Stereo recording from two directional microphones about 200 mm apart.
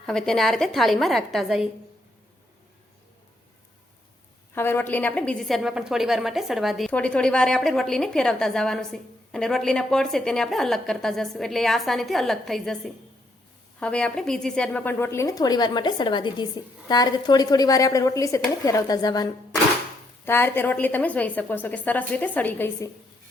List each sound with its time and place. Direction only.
0.0 s a woman's voice: 5° left (ahead or behind)
4.5 s a woman's voice: 10° left (ahead or behind)